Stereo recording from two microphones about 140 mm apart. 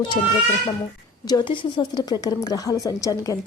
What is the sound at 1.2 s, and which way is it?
A woman's voice, 35° left (ahead or behind).